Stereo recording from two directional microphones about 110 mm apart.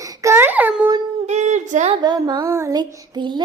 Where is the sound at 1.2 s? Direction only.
90° right.